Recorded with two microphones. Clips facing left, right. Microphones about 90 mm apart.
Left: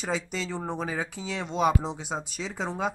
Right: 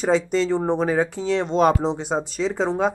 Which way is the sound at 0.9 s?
55° right (ahead or behind).